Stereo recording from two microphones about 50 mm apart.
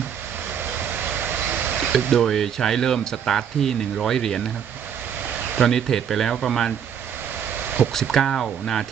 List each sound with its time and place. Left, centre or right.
0.6 s vehicle: right
2.0 s speech: centre
5.5 s speech: centre
7.5 s a sound: right
8.1 s speech: centre